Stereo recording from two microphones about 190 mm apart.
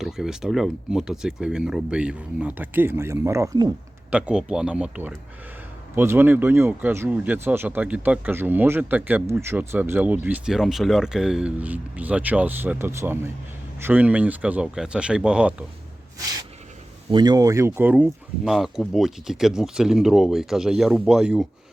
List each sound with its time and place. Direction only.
0.0 s speech: centre (ahead or behind)
4.1 s speech: 5° right (ahead or behind)
16.1 s a sound: 20° right (ahead or behind)
17.1 s speech: 25° right (ahead or behind); by 21.4 s 5° right (ahead or behind)